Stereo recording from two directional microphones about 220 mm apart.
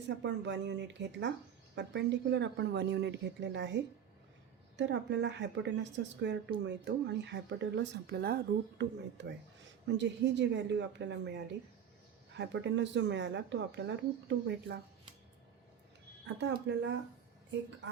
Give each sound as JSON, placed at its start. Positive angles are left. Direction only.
{"t": 0.2, "sound": "a woman's voice", "side_deg": -55}
{"t": 4.8, "sound": "a woman's voice", "side_deg": -55}
{"t": 16.2, "sound": "a woman's voice", "side_deg": -55}